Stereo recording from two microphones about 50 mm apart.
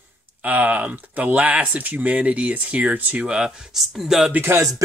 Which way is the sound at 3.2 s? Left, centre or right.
Centre.